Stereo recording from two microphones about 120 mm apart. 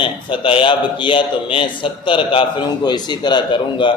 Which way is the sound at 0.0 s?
45° left (ahead or behind).